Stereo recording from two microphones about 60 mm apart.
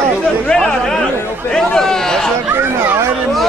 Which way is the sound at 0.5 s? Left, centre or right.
Centre.